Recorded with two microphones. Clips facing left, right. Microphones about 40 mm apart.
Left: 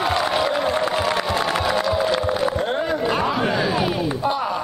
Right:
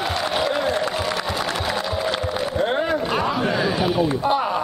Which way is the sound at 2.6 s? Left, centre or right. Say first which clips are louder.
Right 1 dB; centre.